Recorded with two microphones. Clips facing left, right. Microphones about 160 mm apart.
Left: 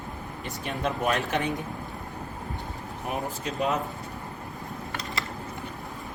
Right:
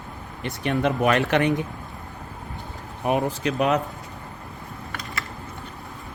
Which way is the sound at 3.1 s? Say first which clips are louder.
Right 9 dB; 80° right.